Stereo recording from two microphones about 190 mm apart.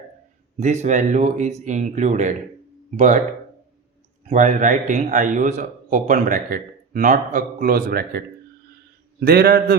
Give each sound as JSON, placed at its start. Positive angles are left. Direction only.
{"t": 0.6, "sound": "speech", "side_deg": -40}
{"t": 4.3, "sound": "a man's voice", "side_deg": -40}
{"t": 9.2, "sound": "a man's voice", "side_deg": -50}